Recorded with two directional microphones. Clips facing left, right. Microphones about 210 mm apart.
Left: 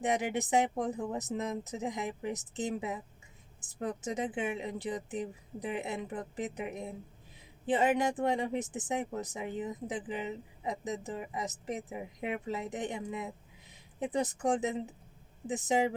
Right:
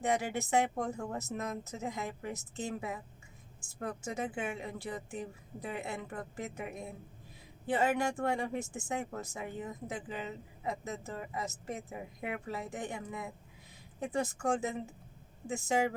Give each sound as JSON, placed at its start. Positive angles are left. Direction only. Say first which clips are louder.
{"t": 0.0, "sound": "speech", "louder": "left 1 dB", "side_deg": 20}